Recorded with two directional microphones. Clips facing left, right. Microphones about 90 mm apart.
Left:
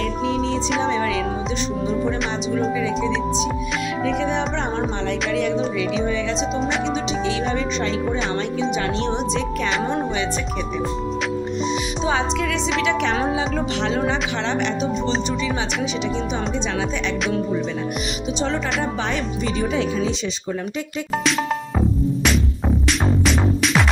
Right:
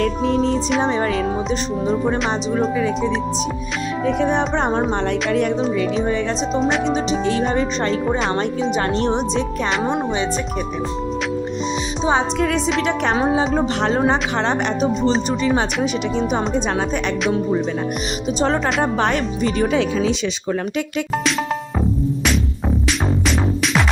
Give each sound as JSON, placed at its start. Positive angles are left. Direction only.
{"t": 0.0, "sound": "music", "side_deg": -45}
{"t": 2.6, "sound": "speech", "side_deg": -45}
{"t": 6.8, "sound": "speech", "side_deg": -40}
{"t": 12.8, "sound": "speech", "side_deg": -45}
{"t": 18.3, "sound": "speech", "side_deg": -50}
{"t": 21.8, "sound": "music", "side_deg": 0}